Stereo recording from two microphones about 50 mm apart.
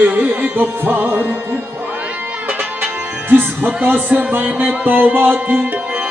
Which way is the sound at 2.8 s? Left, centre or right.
Right.